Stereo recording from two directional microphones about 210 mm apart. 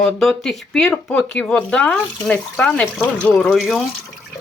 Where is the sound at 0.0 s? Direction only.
Centre (ahead or behind).